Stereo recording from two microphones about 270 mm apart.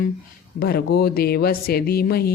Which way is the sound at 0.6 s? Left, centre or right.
Left.